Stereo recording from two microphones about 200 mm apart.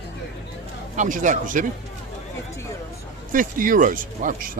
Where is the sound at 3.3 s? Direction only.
45° right (ahead or behind).